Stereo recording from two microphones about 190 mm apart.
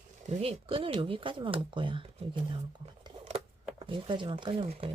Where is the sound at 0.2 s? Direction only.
35° right (ahead or behind).